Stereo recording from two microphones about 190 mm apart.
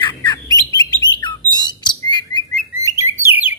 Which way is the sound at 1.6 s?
25° left (ahead or behind).